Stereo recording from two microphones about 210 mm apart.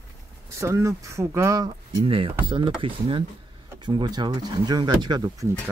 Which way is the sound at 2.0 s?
25° right (ahead or behind).